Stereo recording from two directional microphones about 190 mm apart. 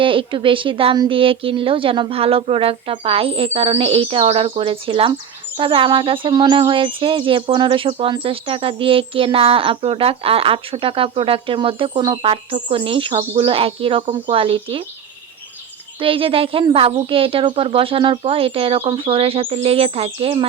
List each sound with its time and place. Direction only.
0.0 s speech: 25° right (ahead or behind)
16.0 s speech: 30° right (ahead or behind)